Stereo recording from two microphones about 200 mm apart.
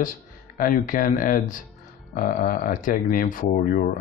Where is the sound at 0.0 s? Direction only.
45° left (ahead or behind).